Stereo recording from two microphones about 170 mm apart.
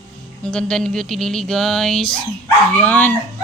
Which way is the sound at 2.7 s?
10° left (ahead or behind).